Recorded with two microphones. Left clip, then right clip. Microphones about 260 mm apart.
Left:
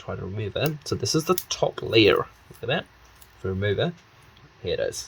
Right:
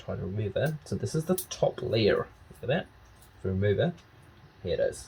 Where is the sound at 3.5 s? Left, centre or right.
Left.